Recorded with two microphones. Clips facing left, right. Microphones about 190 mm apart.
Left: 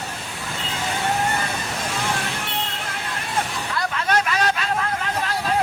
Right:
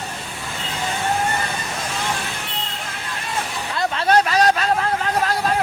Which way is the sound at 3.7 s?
30° right (ahead or behind).